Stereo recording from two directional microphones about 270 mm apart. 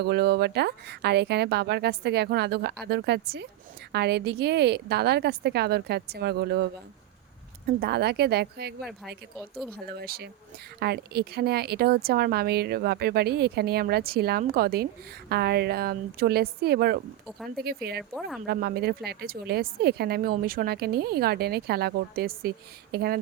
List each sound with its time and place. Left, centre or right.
0.0 s speech: right
7.7 s speech: right
10.0 s speech: right
18.1 s speech: centre
18.4 s speech: right